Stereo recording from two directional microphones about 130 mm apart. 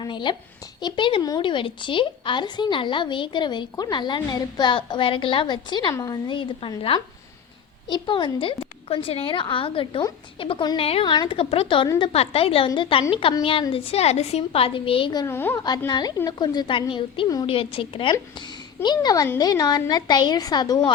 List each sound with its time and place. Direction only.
0.0 s a woman's voice: 35° left (ahead or behind)
15.3 s a woman's voice: 20° left (ahead or behind)
15.9 s a woman's voice: 30° left (ahead or behind)